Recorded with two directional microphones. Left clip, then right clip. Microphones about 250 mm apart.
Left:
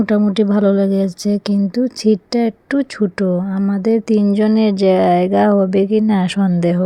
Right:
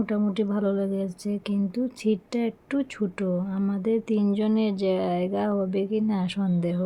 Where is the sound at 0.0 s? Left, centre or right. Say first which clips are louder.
Left 11 dB; left.